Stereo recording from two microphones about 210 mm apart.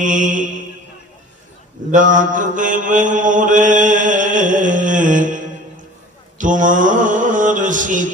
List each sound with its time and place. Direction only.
0.0 s mantra: 40° right (ahead or behind)
1.9 s mantra: 40° right (ahead or behind)